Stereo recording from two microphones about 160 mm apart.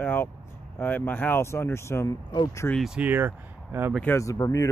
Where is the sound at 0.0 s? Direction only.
10° left (ahead or behind).